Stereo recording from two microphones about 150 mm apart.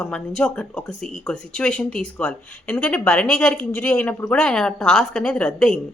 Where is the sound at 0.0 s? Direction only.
5° left (ahead or behind).